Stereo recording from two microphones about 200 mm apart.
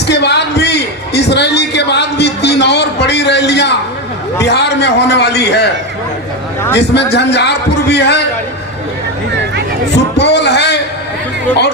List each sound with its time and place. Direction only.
0.1 s a sound: 60° left (ahead or behind)
4.4 s a man's voice: 55° left (ahead or behind)
6.7 s a man's voice: 60° left (ahead or behind)
10.2 s a man's voice: 60° left (ahead or behind)